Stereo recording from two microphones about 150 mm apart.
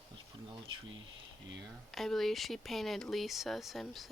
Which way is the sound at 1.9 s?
Centre (ahead or behind).